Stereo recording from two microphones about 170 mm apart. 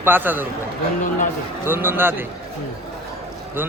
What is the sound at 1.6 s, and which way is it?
Speech, 15° right (ahead or behind).